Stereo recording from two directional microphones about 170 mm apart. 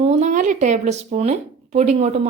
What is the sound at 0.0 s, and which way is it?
A woman's voice, 45° right (ahead or behind).